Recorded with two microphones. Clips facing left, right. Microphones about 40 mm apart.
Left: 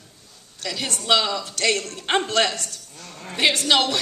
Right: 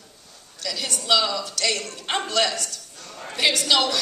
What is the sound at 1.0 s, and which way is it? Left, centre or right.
A woman's voice, left.